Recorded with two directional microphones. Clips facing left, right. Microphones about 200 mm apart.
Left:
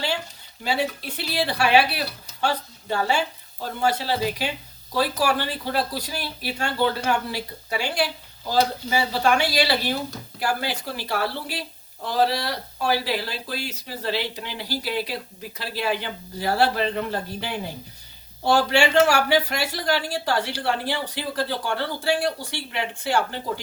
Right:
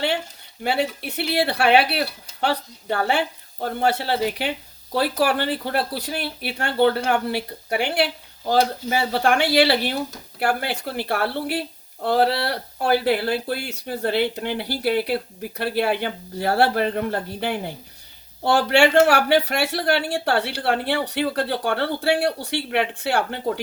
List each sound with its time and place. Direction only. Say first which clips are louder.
0.6 s speech: right 2 dB; 60° right (ahead or behind)